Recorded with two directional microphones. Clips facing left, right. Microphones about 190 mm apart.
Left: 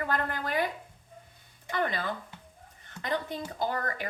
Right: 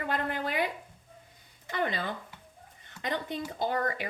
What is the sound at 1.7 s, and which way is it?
Speech, 20° right (ahead or behind).